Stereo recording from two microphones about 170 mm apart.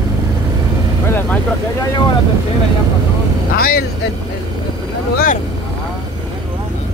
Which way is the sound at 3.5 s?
60° left (ahead or behind).